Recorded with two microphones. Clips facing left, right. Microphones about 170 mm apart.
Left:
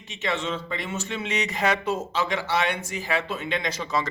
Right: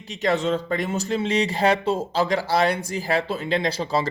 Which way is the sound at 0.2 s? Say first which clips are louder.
Right 6 dB; 40° right (ahead or behind).